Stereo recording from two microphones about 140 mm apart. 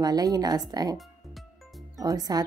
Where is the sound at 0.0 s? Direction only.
25° right (ahead or behind).